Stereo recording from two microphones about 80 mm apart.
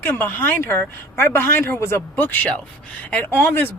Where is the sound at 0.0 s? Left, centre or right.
Left.